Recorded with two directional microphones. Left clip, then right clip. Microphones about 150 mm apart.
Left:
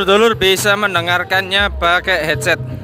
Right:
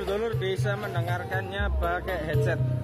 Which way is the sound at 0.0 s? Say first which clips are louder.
Left 17 dB; 35° left (ahead or behind).